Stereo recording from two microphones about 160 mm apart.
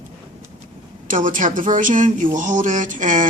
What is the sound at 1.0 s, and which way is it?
A woman's voice, 55° right (ahead or behind).